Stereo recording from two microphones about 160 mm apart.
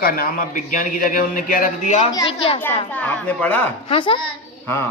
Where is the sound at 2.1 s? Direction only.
30° left (ahead or behind).